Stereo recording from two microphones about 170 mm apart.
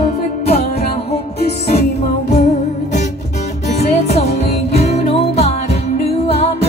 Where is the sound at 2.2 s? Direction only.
45° left (ahead or behind).